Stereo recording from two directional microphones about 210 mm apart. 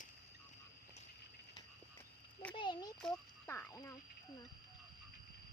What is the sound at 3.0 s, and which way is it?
Speech, 5° left (ahead or behind).